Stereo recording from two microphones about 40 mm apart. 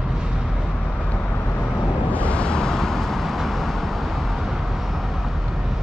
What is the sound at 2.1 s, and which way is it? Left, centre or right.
Vehicle, left.